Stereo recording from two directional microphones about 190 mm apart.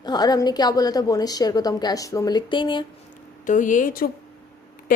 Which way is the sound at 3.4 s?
40° left (ahead or behind).